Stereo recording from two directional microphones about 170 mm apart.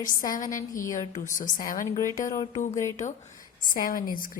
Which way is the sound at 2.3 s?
30° left (ahead or behind).